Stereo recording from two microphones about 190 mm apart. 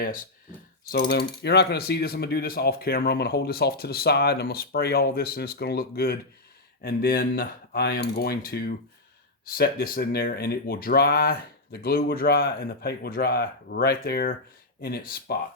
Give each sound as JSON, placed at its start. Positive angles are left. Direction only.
{"t": 0.9, "sound": "speech", "side_deg": 55}